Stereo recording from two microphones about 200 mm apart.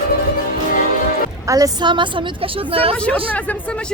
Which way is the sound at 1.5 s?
15° right (ahead or behind).